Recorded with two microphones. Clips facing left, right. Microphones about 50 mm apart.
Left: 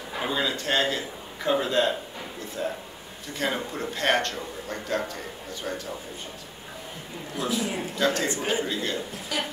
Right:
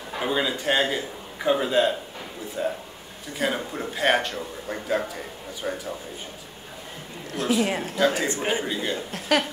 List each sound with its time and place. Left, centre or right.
0.3 s a man's voice: centre
7.6 s speech: right
8.0 s a man's voice: centre
9.3 s speech: right